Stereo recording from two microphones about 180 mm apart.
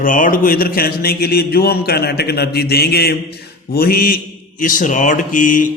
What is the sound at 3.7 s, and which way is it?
Mantra, 55° left (ahead or behind).